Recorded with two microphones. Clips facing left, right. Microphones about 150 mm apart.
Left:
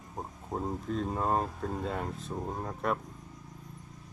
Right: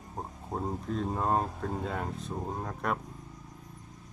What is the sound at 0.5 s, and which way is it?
Speech, centre (ahead or behind).